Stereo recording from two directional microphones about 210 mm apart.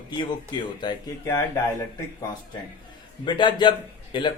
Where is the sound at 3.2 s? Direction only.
20° left (ahead or behind).